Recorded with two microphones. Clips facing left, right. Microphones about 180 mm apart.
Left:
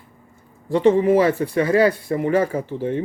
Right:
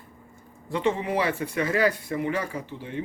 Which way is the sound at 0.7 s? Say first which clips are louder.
Left 10 dB; 40° left (ahead or behind).